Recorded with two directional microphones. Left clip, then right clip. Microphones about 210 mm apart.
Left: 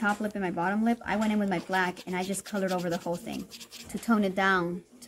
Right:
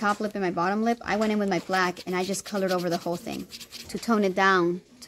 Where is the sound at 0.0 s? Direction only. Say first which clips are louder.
Right 3 dB; 50° right (ahead or behind).